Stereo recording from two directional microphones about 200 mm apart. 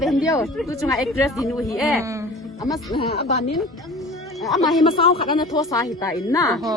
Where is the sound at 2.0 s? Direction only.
15° right (ahead or behind).